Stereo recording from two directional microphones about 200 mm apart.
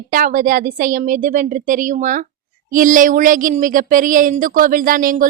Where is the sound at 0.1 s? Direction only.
40° right (ahead or behind).